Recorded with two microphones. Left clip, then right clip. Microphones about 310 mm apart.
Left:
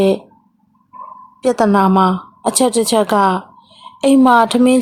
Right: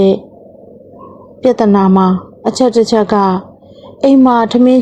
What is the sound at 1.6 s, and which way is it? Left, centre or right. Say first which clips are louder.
A woman's voice: right 1 dB; centre.